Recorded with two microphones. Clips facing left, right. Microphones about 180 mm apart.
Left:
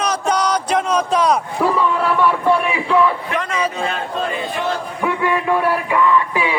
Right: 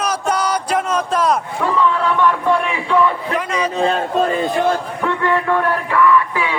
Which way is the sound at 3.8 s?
35° right (ahead or behind).